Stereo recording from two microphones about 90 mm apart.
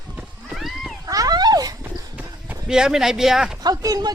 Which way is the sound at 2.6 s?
5° right (ahead or behind).